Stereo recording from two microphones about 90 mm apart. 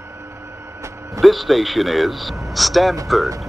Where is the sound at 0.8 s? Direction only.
35° right (ahead or behind).